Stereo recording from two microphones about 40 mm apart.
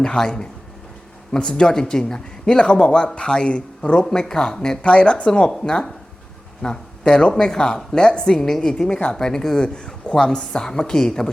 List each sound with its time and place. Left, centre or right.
0.0 s speech: centre
4.8 s speech: left
5.5 s speech: centre
8.9 s speech: left
9.1 s speech: centre